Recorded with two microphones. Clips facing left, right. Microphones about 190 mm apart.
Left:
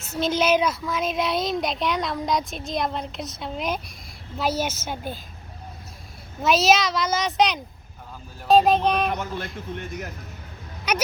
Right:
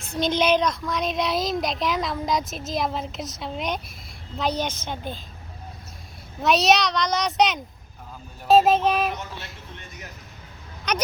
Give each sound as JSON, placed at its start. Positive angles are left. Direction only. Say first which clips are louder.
{"t": 0.0, "sound": "a child's voice", "louder": "even", "side_deg": 5}
{"t": 6.4, "sound": "speech", "louder": "even", "side_deg": 0}
{"t": 9.1, "sound": "speech", "louder": "left 6 dB", "side_deg": 55}
{"t": 10.9, "sound": "a child's voice", "louder": "left 1 dB", "side_deg": 10}